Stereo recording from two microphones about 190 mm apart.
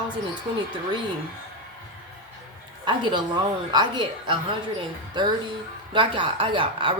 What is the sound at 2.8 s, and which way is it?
Speech, 25° right (ahead or behind).